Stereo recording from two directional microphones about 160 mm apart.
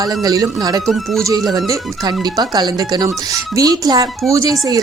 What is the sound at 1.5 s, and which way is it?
Speech, 20° right (ahead or behind).